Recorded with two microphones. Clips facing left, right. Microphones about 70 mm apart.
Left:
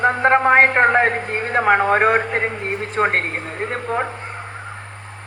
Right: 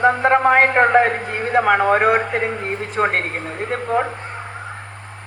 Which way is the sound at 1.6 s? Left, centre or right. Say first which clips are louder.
Even; left.